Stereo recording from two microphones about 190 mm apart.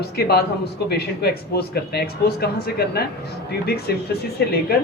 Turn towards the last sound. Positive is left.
turn(degrees=55)  # may be behind; listen again after turning